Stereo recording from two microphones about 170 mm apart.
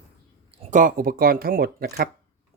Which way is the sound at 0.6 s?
50° right (ahead or behind).